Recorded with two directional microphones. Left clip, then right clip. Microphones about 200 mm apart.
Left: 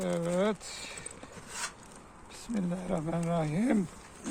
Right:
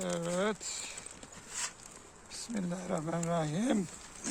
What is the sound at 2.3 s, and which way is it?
Speech, 20° right (ahead or behind).